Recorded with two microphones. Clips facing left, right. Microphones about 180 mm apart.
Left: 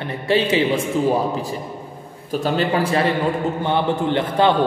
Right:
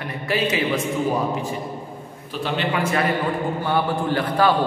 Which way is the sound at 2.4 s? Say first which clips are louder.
Left 3 dB; 35° left (ahead or behind).